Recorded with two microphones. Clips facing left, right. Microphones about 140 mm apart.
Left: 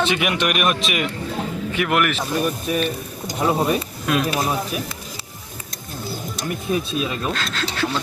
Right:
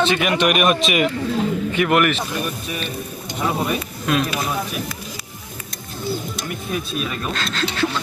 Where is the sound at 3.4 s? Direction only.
35° left (ahead or behind).